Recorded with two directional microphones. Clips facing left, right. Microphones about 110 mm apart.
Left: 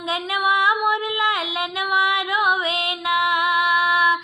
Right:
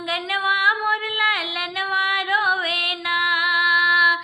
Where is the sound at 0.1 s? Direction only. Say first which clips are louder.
Left 3 dB; 25° left (ahead or behind).